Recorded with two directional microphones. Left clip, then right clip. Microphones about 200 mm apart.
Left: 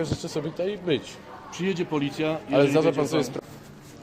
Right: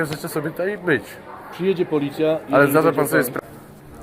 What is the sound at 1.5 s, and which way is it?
Speech, 40° left (ahead or behind).